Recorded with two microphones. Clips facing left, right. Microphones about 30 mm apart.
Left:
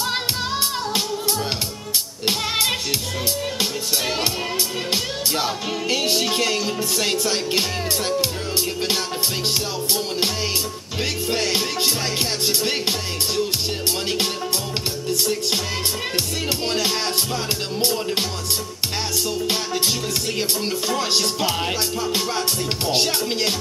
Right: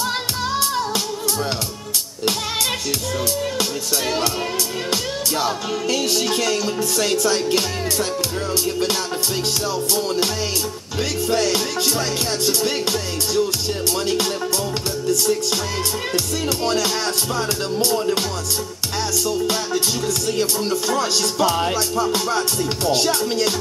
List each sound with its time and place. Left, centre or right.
5.9 s music: left
9.9 s music: centre
19.2 s music: centre